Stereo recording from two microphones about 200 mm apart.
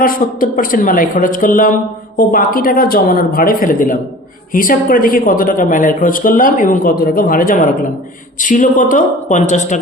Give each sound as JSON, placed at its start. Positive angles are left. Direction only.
{"t": 0.0, "sound": "a woman's voice", "side_deg": 45}